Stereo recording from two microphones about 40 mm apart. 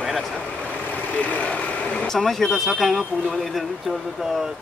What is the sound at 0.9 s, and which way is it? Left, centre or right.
Vehicle, left.